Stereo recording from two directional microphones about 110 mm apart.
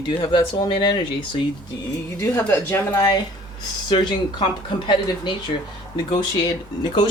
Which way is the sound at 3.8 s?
45° left (ahead or behind).